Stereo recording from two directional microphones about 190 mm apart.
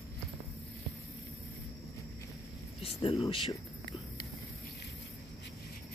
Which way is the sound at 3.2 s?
30° left (ahead or behind).